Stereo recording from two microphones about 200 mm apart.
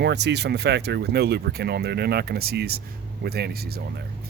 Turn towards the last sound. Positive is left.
turn(degrees=-50)  # may be behind; listen again after turning